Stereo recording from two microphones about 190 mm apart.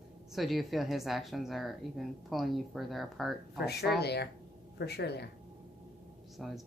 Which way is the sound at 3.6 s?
60° left (ahead or behind).